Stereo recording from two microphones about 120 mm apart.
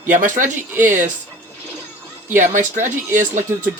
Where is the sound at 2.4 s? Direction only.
90° right.